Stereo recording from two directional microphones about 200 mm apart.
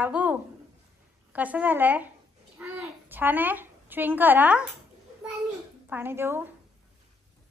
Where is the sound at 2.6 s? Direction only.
10° right (ahead or behind).